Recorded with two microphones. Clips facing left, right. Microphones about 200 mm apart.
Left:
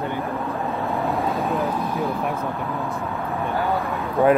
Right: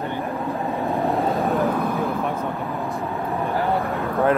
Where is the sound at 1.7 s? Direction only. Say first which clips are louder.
Right 2 dB; 55° right (ahead or behind).